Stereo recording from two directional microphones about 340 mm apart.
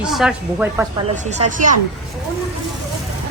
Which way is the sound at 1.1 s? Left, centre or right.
Centre.